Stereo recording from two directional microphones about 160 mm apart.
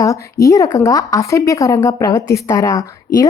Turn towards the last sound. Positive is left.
turn(degrees=20)  # may be behind; listen again after turning